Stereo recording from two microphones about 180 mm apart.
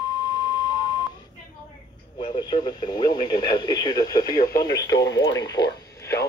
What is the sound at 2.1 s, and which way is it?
Radio, 35° left (ahead or behind).